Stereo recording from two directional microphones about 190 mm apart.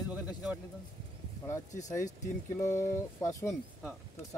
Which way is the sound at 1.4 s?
15° left (ahead or behind).